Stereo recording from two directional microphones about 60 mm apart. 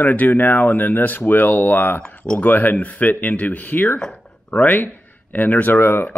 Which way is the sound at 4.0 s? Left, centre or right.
Centre.